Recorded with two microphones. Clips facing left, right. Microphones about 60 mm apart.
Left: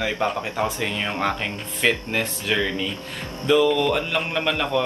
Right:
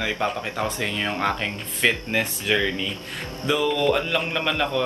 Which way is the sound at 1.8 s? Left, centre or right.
Right.